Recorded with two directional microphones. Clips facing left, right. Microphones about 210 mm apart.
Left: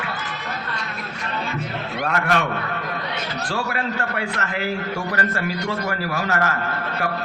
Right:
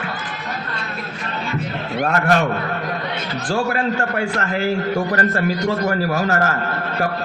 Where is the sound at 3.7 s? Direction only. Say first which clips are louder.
Right 5 dB; 40° right (ahead or behind).